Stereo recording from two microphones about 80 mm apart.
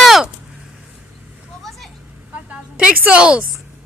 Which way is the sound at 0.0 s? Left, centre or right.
Centre.